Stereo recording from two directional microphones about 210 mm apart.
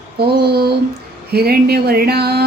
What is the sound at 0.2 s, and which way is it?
A woman's voice, 50° right (ahead or behind).